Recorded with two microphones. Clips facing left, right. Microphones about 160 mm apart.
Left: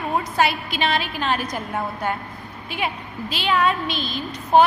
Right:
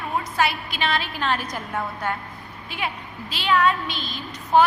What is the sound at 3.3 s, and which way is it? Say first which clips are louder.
Speech: even; 20° left (ahead or behind).